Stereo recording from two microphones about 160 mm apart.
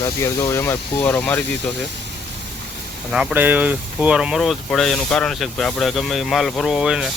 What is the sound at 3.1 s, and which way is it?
Speech, 5° right (ahead or behind).